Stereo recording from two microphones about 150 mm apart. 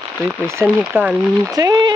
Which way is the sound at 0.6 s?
10° right (ahead or behind).